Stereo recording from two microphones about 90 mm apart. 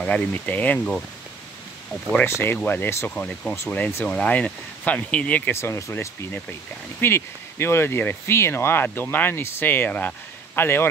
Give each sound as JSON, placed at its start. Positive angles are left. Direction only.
{"t": 0.0, "sound": "speech", "side_deg": 15}
{"t": 2.2, "sound": "speech", "side_deg": 25}
{"t": 3.2, "sound": "speech", "side_deg": 10}
{"t": 5.5, "sound": "speech", "side_deg": 30}